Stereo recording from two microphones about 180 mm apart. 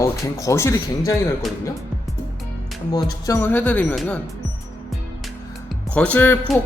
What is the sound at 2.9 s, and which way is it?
A woman's voice, 15° left (ahead or behind).